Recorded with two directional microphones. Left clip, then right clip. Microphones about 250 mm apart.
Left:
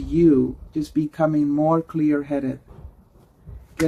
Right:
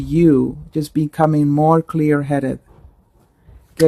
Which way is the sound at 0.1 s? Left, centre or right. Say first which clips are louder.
Right 3 dB; right.